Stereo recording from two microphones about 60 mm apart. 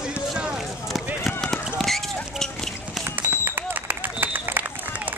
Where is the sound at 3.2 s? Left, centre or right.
Right.